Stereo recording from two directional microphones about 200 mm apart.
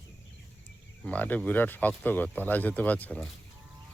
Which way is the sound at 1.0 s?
5° left (ahead or behind).